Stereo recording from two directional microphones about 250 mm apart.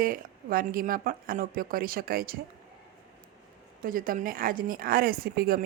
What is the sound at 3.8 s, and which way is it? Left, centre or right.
A woman's voice, right.